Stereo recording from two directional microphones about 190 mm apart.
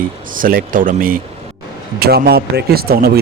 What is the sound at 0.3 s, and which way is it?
Speech, 45° right (ahead or behind).